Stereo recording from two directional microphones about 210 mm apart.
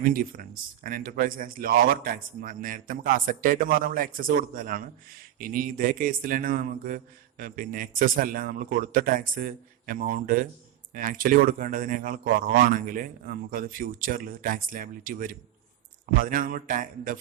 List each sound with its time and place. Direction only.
0.0 s a man's voice: 40° right (ahead or behind)